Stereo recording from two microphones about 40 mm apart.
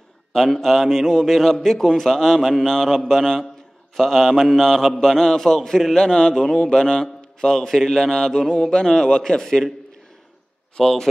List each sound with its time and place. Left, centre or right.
0.5 s a man's voice: centre
5.9 s a man's voice: centre
10.8 s a man's voice: centre